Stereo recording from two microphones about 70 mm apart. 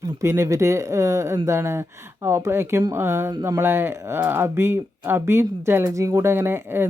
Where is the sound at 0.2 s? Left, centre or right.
Right.